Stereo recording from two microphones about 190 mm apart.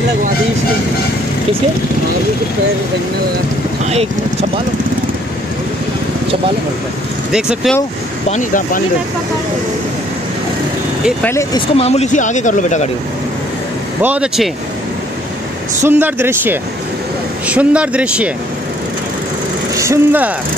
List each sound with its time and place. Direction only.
3.9 s speech: 35° right (ahead or behind)
7.3 s speech: 5° right (ahead or behind)
8.3 s speech: 45° left (ahead or behind)
11.2 s speech: 15° left (ahead or behind)
11.7 s speech: 35° left (ahead or behind)
14.0 s speech: 5° right (ahead or behind)
15.8 s speech: 10° right (ahead or behind)
19.8 s speech: 15° right (ahead or behind)